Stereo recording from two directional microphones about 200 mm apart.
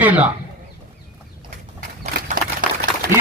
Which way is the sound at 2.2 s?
40° right (ahead or behind).